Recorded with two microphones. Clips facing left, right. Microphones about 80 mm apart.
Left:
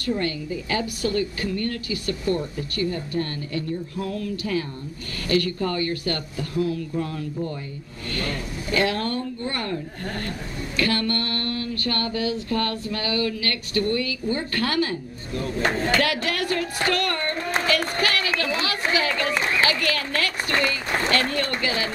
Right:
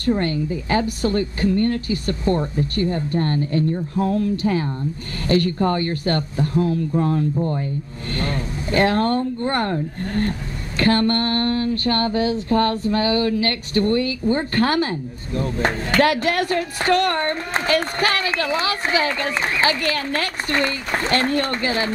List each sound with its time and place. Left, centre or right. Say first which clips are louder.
0.2 s a woman's voice: right 4 dB; right
10.8 s a woman's voice: right 6 dB; right